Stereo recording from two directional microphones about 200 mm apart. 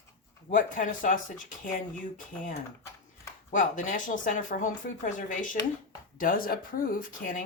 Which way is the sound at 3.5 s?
40° left (ahead or behind).